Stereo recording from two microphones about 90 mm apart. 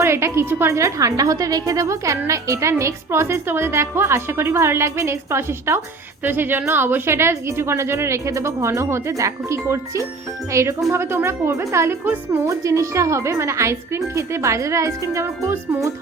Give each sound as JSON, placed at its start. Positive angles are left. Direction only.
{"t": 0.0, "sound": "a woman's voice", "side_deg": -30}
{"t": 12.5, "sound": "a woman's voice", "side_deg": -35}